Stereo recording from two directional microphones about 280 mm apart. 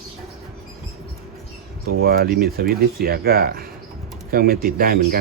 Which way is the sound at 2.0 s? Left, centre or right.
Right.